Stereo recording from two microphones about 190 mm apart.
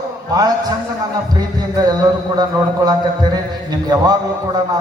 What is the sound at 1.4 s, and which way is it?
A man's voice, 20° right (ahead or behind).